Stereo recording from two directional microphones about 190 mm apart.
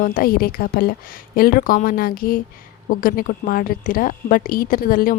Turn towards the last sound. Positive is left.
turn(degrees=50)  # may be behind; listen again after turning